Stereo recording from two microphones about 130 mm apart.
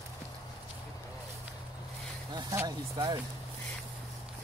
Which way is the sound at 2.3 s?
35° right (ahead or behind).